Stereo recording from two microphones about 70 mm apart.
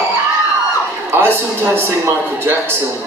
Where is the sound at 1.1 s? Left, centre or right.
Right.